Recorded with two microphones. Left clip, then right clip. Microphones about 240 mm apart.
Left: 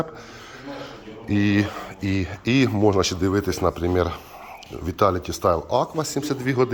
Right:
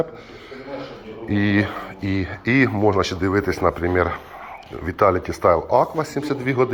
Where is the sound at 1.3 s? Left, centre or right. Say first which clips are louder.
Right 1 dB; left.